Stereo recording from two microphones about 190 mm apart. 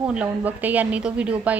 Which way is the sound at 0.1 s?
5° right (ahead or behind).